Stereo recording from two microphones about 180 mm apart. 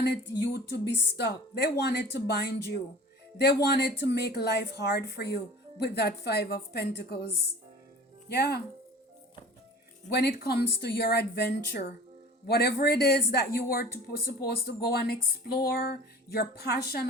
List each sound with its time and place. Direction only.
0.0 s speech: 65° left (ahead or behind)
8.3 s speech: 60° left (ahead or behind)
10.1 s speech: 65° left (ahead or behind)